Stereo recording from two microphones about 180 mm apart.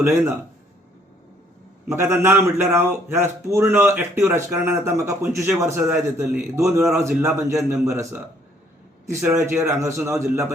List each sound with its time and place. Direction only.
0.0 s a man's voice: 15° right (ahead or behind)
1.9 s a man's voice: 15° right (ahead or behind)